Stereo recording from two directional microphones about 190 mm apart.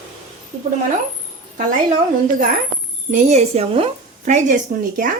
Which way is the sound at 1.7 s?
45° right (ahead or behind).